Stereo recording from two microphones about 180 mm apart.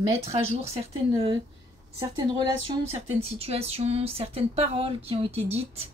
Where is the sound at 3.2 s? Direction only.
35° right (ahead or behind).